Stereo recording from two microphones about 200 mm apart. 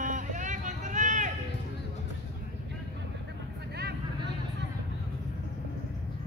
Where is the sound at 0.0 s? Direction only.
40° right (ahead or behind).